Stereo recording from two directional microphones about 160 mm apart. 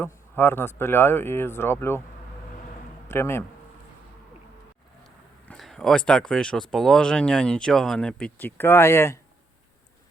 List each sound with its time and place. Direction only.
0.0 s speech: 15° left (ahead or behind)
3.1 s speech: 15° left (ahead or behind)
5.5 s speech: 5° left (ahead or behind)